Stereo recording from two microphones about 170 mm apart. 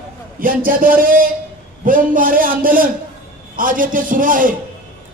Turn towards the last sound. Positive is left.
turn(degrees=-55)  # may be behind; listen again after turning